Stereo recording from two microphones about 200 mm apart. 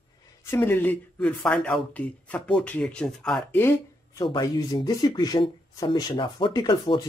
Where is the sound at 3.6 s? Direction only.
20° left (ahead or behind).